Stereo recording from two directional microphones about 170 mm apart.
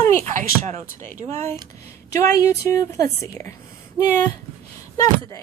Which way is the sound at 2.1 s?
20° left (ahead or behind).